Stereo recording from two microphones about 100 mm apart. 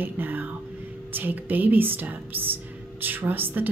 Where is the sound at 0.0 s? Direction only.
20° right (ahead or behind).